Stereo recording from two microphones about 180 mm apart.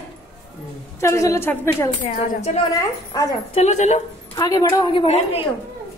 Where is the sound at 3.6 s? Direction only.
40° left (ahead or behind).